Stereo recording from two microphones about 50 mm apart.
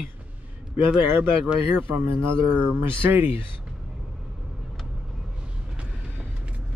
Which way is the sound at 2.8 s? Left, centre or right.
Right.